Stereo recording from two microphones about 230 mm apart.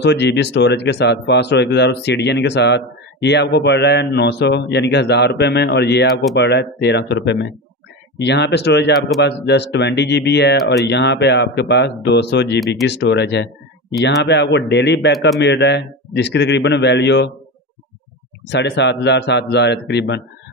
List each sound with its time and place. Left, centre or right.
0.0 s speech: left
12.5 s speech: centre
12.8 s speech: left
15.1 s speech: centre
15.4 s speech: left
18.5 s speech: left